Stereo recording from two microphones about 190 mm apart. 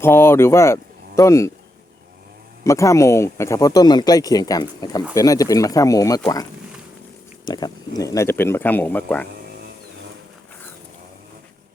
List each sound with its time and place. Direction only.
0.0 s speech: 10° left (ahead or behind)
2.6 s speech: 15° left (ahead or behind)
7.4 s speech: 20° left (ahead or behind)